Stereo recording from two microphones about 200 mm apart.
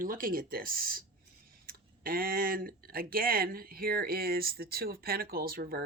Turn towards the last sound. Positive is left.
turn(degrees=-50)  # may be behind; listen again after turning